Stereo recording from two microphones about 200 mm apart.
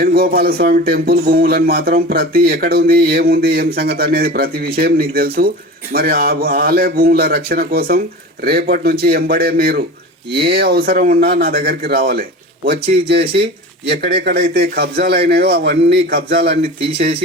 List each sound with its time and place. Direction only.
0.0 s speech: 50° right (ahead or behind)
14.0 s speech: 50° right (ahead or behind)